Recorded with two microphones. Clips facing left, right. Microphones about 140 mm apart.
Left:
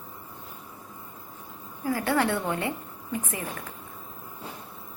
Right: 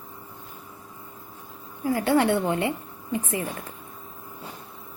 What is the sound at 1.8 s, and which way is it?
A woman's voice, 25° right (ahead or behind).